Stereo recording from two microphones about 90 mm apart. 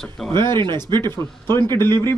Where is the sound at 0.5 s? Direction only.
55° right (ahead or behind).